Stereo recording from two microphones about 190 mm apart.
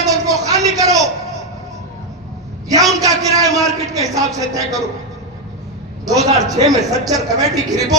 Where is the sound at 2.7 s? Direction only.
20° right (ahead or behind).